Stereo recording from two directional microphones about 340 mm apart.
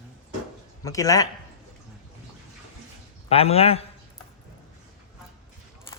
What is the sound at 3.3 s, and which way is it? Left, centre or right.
Speech, centre.